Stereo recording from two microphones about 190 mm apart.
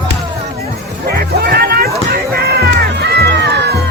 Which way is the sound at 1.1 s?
55° right (ahead or behind).